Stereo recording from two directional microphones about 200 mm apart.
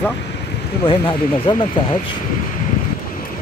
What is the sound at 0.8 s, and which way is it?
Speech, 25° left (ahead or behind).